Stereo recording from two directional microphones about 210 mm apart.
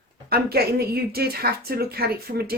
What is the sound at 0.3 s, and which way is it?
Speech, 50° right (ahead or behind).